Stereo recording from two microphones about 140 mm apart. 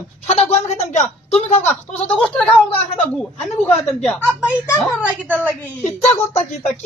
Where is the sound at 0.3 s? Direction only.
50° left (ahead or behind).